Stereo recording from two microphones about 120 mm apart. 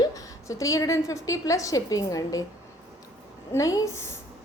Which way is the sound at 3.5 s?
25° left (ahead or behind).